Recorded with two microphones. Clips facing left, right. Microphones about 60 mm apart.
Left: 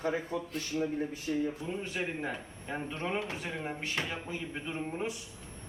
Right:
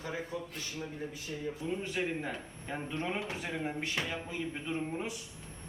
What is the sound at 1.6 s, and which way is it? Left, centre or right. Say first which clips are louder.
Speech: right 1 dB; centre.